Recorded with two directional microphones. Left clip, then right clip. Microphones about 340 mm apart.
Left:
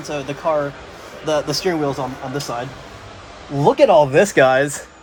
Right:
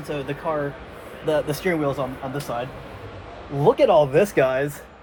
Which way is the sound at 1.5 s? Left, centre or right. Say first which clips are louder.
Left 4 dB; centre.